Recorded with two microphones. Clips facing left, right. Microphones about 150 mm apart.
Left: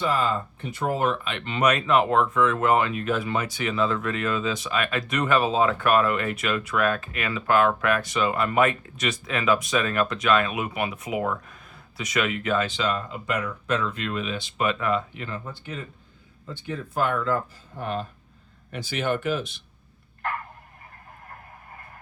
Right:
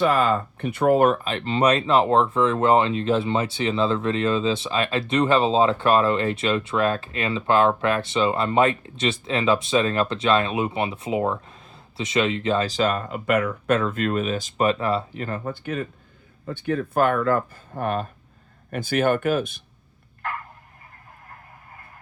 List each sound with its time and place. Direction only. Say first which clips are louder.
0.0 s speech: right 5 dB; 60° right (ahead or behind); by 15.3 s 35° right (ahead or behind)
15.3 s speech: right 6 dB; 55° right (ahead or behind)